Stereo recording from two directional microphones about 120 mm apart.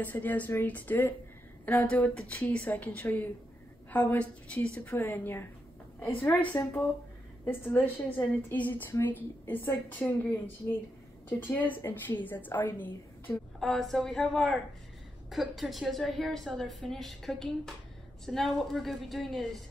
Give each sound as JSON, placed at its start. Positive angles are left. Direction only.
{"t": 0.0, "sound": "a woman's voice", "side_deg": 15}
{"t": 13.6, "sound": "a woman's voice", "side_deg": 5}